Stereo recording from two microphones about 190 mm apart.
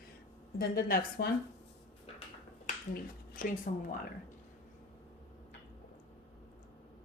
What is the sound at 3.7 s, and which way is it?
Speech, 45° left (ahead or behind).